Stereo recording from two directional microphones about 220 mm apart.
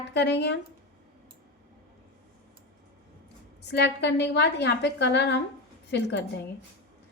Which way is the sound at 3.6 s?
50° left (ahead or behind).